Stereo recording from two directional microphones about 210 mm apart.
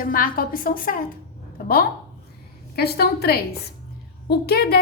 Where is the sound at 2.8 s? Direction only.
50° left (ahead or behind).